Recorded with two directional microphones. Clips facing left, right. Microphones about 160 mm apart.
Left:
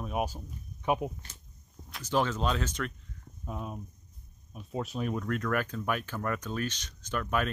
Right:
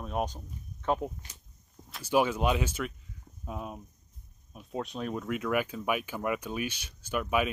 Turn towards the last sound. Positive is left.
turn(degrees=-10)  # may be behind; listen again after turning